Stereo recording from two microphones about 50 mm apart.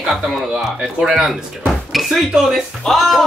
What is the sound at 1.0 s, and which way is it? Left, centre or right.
A man's voice, centre.